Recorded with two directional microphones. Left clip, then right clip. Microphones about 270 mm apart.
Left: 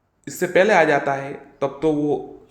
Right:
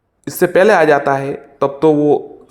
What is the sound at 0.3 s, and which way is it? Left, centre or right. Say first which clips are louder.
Speech: right 6 dB; right.